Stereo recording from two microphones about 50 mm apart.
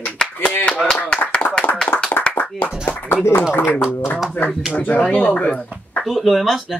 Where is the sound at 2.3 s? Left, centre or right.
Left.